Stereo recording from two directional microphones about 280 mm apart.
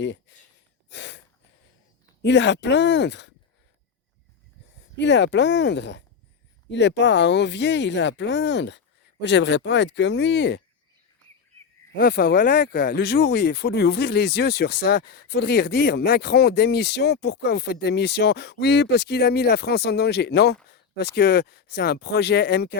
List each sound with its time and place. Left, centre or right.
0.0 s speech: left
0.9 s a sound: left
2.2 s speech: left
4.9 s speech: left
11.9 s speech: left